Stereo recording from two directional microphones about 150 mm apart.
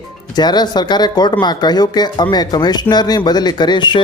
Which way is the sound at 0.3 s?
30° left (ahead or behind).